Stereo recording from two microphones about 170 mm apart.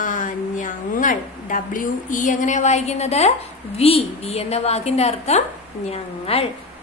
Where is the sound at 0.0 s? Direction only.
50° left (ahead or behind).